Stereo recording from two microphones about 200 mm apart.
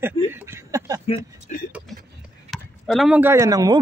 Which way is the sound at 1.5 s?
40° left (ahead or behind).